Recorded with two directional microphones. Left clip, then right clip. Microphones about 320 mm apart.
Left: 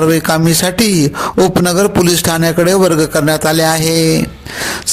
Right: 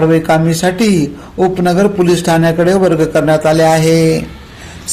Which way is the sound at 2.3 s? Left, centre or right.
Left.